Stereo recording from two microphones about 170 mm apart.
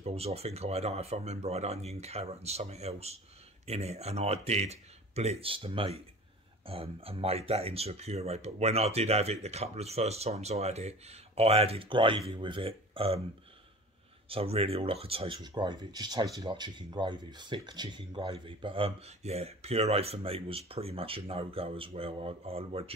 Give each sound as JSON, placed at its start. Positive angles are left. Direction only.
{"t": 0.0, "sound": "speech", "side_deg": -35}
{"t": 14.3, "sound": "speech", "side_deg": -35}